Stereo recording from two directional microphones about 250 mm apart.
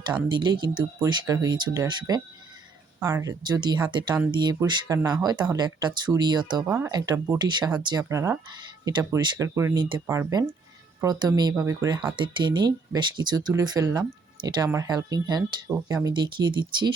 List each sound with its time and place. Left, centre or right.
0.3 s speech: centre